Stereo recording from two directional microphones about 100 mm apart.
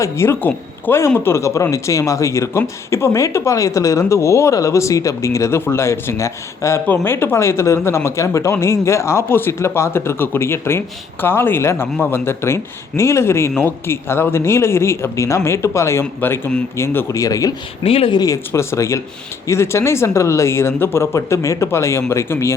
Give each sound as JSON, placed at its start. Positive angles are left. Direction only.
{"t": 0.0, "sound": "speech", "side_deg": 25}
{"t": 17.1, "sound": "speech", "side_deg": 35}
{"t": 17.8, "sound": "speech", "side_deg": 70}
{"t": 18.1, "sound": "speech", "side_deg": 40}
{"t": 18.5, "sound": "speech", "side_deg": 30}